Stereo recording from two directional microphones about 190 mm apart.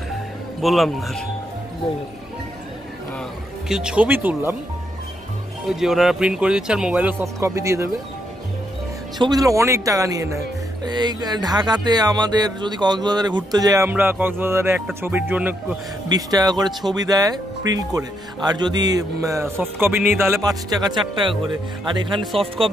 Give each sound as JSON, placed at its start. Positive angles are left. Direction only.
{"t": 0.6, "sound": "speech", "side_deg": 0}
{"t": 3.6, "sound": "speech", "side_deg": -5}
{"t": 5.7, "sound": "speech", "side_deg": 0}
{"t": 9.2, "sound": "speech", "side_deg": -20}
{"t": 16.1, "sound": "speech", "side_deg": -20}
{"t": 22.2, "sound": "speech", "side_deg": 0}